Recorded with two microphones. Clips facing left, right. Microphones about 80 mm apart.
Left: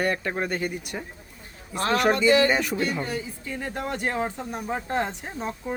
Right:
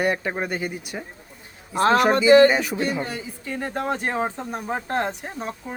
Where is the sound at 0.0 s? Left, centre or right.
Centre.